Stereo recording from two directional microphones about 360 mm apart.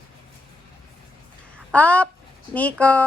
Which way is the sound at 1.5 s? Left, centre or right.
Centre.